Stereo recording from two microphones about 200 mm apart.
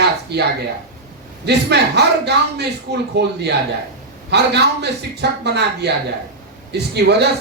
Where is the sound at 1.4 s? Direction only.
55° right (ahead or behind).